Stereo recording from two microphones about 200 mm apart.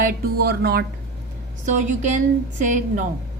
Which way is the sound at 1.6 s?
40° right (ahead or behind).